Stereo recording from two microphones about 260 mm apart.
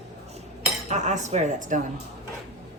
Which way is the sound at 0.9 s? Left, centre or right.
Right.